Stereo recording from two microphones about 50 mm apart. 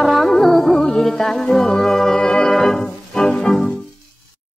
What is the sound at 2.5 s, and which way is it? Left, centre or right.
Organ, centre.